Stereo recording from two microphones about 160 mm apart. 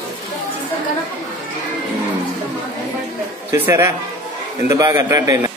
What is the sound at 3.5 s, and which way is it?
A man's voice, 15° right (ahead or behind).